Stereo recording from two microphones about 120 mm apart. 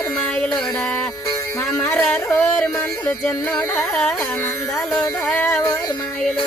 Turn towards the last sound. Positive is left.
turn(degrees=20)  # may be behind; listen again after turning